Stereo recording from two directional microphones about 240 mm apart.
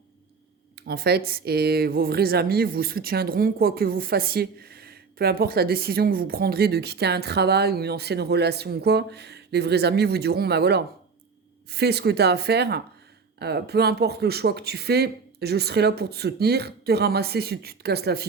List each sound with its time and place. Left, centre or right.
0.8 s speech: right